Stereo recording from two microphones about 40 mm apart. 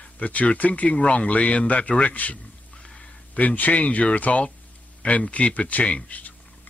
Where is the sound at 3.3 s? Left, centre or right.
Left.